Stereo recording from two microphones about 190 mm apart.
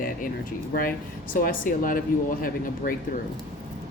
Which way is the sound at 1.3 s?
50° left (ahead or behind).